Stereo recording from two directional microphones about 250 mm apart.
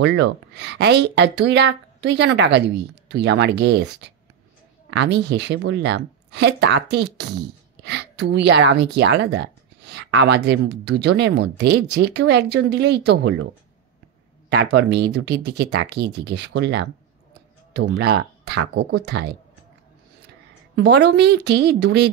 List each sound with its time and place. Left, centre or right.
0.0 s speech: right
14.5 s speech: right
20.7 s speech: right